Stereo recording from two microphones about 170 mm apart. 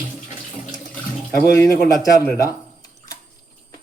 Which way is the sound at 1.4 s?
15° left (ahead or behind).